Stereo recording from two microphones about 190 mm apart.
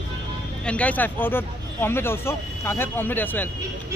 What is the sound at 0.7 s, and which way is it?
Speech, 5° left (ahead or behind).